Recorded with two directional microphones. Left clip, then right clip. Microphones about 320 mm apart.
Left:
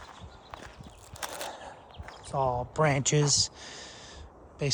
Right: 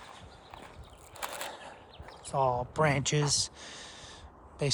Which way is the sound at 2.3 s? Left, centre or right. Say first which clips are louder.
Even; centre.